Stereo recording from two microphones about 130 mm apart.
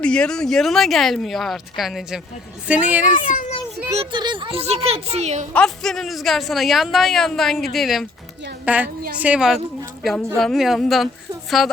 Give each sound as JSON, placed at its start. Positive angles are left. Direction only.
{"t": 0.0, "sound": "a woman's voice", "side_deg": 5}
{"t": 4.1, "sound": "a woman's voice", "side_deg": -35}
{"t": 5.5, "sound": "speech", "side_deg": 5}
{"t": 8.6, "sound": "a woman's voice", "side_deg": -10}